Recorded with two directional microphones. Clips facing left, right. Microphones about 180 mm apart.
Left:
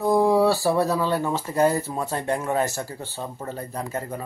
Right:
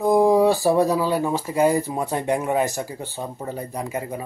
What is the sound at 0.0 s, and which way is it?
Speech, 15° right (ahead or behind).